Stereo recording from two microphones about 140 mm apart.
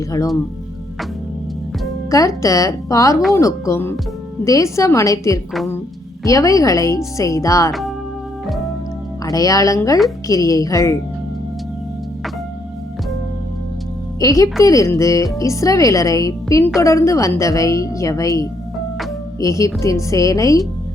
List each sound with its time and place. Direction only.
2.0 s a woman's voice: 25° left (ahead or behind)
7.7 s music: centre (ahead or behind)
9.2 s a woman's voice: 25° left (ahead or behind)
14.2 s a woman's voice: 25° left (ahead or behind)